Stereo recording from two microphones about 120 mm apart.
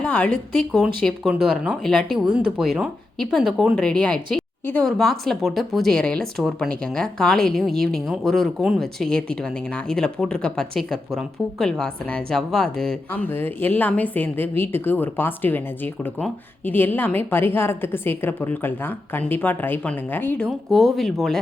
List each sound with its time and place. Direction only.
0.0 s speech: 10° left (ahead or behind)
0.7 s a woman's voice: centre (ahead or behind)
13.2 s a woman's voice: 15° left (ahead or behind)
20.5 s speech: centre (ahead or behind)